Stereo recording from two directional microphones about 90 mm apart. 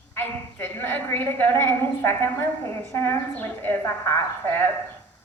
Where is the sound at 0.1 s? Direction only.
25° left (ahead or behind).